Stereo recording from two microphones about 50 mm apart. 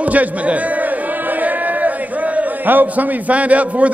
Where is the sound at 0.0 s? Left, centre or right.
Right.